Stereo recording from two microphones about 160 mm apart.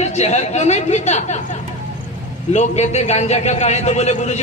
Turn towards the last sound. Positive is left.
turn(degrees=45)  # may be behind; listen again after turning